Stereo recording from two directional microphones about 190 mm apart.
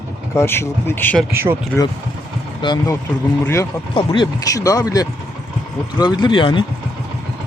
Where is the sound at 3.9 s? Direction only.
25° left (ahead or behind).